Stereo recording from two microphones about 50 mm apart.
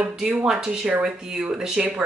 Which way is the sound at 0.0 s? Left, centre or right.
Right.